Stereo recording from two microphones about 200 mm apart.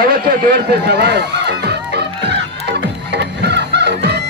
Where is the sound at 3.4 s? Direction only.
60° right (ahead or behind).